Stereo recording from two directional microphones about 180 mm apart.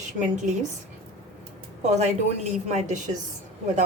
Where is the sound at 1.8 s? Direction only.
40° right (ahead or behind).